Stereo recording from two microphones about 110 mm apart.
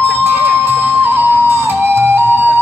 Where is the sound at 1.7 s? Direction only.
20° right (ahead or behind).